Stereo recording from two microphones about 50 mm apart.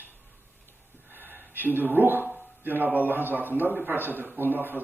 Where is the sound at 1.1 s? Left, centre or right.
Right.